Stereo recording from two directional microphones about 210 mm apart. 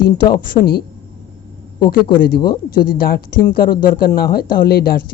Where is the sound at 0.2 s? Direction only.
20° left (ahead or behind).